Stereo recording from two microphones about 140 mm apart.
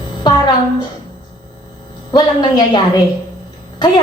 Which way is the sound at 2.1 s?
30° left (ahead or behind).